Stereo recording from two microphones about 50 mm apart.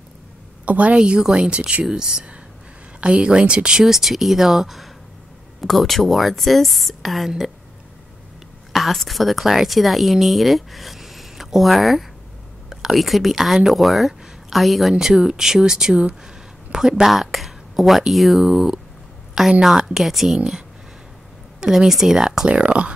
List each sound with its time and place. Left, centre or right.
0.7 s a woman's voice: right
1.9 s a woman's voice: centre
3.8 s speech: centre
8.7 s speech: centre
21.5 s speech: centre